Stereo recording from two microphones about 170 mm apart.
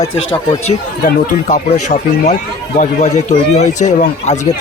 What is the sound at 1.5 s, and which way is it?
Speech, 45° left (ahead or behind).